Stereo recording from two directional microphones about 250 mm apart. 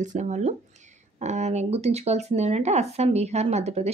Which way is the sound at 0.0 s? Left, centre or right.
Right.